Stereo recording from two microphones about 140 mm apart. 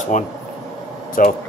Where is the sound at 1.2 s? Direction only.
75° left (ahead or behind).